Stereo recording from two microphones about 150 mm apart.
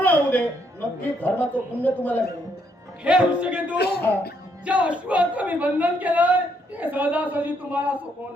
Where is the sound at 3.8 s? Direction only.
90° left.